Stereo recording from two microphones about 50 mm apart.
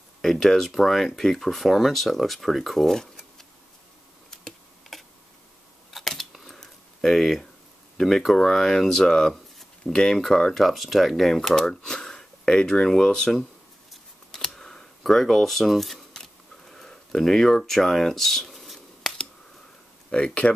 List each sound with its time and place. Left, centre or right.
0.2 s speech: centre
4.9 s tick: centre
5.9 s scissors: centre
6.3 s a sound: centre
8.0 s speech: centre
9.3 s a sound: centre
10.1 s speech: centre
14.5 s camera: centre
16.1 s a sound: centre
20.1 s speech: centre